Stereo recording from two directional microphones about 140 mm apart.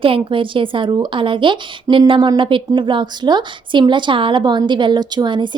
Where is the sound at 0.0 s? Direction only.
40° right (ahead or behind).